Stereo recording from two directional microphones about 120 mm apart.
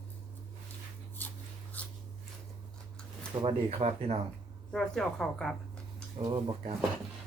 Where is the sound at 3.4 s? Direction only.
55° right (ahead or behind).